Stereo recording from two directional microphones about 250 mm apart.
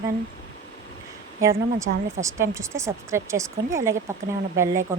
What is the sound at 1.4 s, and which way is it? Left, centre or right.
Speech, centre.